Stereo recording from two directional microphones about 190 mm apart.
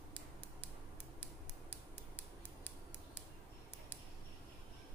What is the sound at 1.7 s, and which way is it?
Creak, 10° left (ahead or behind).